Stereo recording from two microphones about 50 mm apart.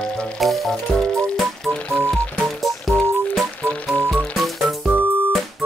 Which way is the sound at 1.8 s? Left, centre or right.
Centre.